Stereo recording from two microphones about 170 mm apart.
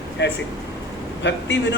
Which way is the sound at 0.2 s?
90° left.